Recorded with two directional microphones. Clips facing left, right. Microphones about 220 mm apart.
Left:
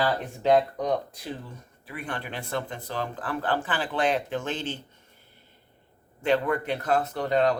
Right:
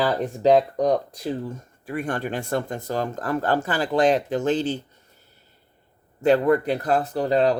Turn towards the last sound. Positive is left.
turn(degrees=-35)  # may be behind; listen again after turning